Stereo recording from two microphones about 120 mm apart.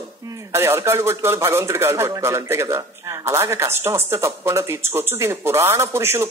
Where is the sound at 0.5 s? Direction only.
20° right (ahead or behind).